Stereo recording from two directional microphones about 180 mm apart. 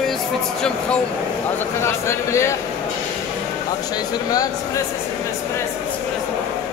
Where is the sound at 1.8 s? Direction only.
15° left (ahead or behind).